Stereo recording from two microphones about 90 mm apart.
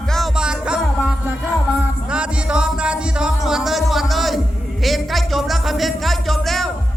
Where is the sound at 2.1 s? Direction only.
10° right (ahead or behind).